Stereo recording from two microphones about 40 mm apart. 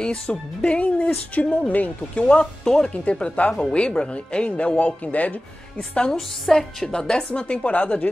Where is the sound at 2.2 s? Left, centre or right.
Left.